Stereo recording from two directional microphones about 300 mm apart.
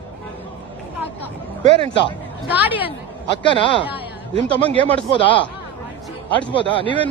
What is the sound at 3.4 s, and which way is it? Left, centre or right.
Speech, centre.